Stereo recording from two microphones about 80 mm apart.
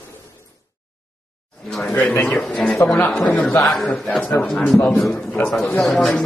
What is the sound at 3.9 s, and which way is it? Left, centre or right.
Speech, centre.